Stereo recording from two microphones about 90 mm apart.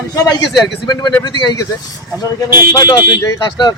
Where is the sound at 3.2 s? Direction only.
50° left (ahead or behind).